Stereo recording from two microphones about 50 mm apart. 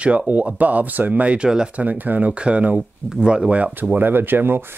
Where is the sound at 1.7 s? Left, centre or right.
Right.